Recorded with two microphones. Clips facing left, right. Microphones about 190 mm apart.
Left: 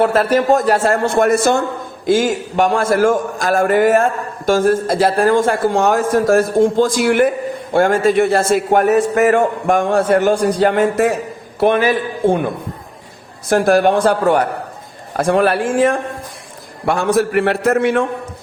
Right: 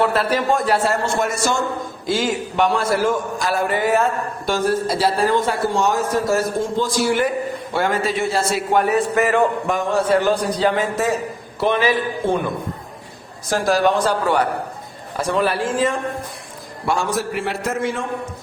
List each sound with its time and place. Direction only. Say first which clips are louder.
0.0 s a man's voice: left 5 dB; 45° left (ahead or behind)
2.0 s a man's voice: left 6 dB; 45° left (ahead or behind)
13.5 s a man's voice: left 5 dB; 55° left (ahead or behind)